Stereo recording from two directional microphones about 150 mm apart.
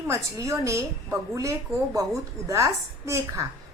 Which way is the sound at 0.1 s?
20° right (ahead or behind).